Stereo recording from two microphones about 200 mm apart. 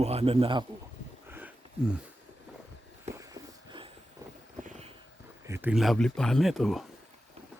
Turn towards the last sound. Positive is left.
turn(degrees=0)  # may be behind; listen again after turning